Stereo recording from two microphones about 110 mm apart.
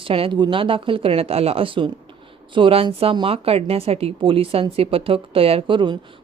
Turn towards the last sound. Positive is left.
turn(degrees=-45)  # may be behind; listen again after turning